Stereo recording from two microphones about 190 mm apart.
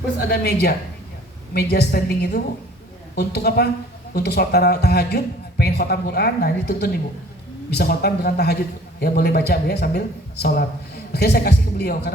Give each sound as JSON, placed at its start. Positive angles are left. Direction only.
{"t": 0.3, "sound": "a man's voice", "side_deg": 55}